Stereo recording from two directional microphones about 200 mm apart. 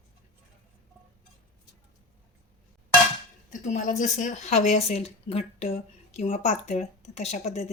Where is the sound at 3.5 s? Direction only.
40° left (ahead or behind).